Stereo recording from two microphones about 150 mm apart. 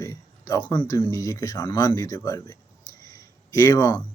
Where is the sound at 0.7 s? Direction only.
25° left (ahead or behind).